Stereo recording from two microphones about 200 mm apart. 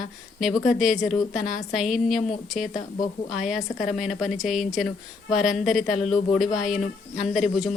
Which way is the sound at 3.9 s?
Centre (ahead or behind).